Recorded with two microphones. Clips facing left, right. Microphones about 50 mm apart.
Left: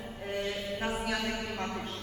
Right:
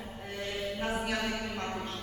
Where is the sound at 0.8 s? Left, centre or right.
Centre.